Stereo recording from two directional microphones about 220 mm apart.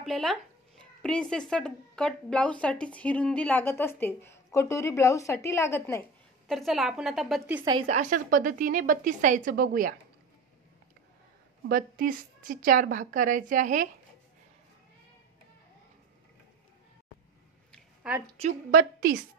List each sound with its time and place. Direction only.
0.0 s speech: centre (ahead or behind)
6.5 s a woman's voice: centre (ahead or behind)
7.8 s a woman's voice: 35° right (ahead or behind)
11.7 s a woman's voice: 40° right (ahead or behind)
18.0 s a woman's voice: 5° right (ahead or behind)
18.4 s a woman's voice: 35° right (ahead or behind)